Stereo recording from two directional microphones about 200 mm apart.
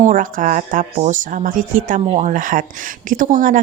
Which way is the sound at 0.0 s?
40° right (ahead or behind).